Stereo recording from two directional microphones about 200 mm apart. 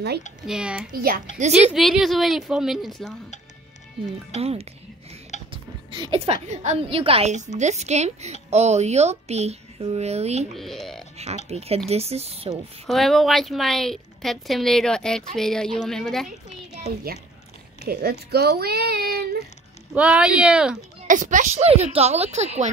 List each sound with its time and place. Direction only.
0.5 s a woman's voice: 5° right (ahead or behind)
0.9 s speech: 45° right (ahead or behind)
1.5 s a woman's voice: 5° right (ahead or behind)
4.4 s a woman's voice: 30° right (ahead or behind)
10.5 s speech: centre (ahead or behind)
11.4 s a woman's voice: 30° right (ahead or behind)
12.8 s a woman's voice: centre (ahead or behind)
17.8 s speech: 50° right (ahead or behind)
19.9 s a woman's voice: 5° right (ahead or behind)
21.1 s a woman's voice: 40° right (ahead or behind)